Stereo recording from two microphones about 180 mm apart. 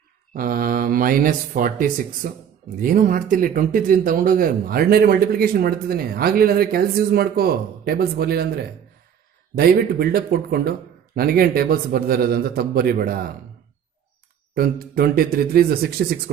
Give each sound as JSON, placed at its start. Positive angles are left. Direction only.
{"t": 0.3, "sound": "speech", "side_deg": -50}
{"t": 9.6, "sound": "speech", "side_deg": -60}
{"t": 14.5, "sound": "speech", "side_deg": -55}